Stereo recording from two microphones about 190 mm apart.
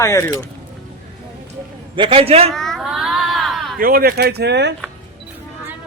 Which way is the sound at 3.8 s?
50° right (ahead or behind).